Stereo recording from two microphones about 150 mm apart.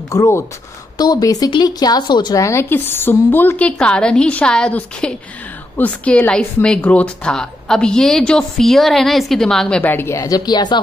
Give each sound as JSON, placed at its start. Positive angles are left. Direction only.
{"t": 0.1, "sound": "a woman's voice", "side_deg": 20}